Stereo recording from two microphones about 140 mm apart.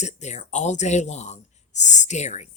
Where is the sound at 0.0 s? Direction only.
55° left (ahead or behind).